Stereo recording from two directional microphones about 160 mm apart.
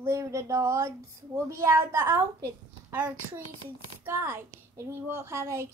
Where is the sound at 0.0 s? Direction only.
20° right (ahead or behind).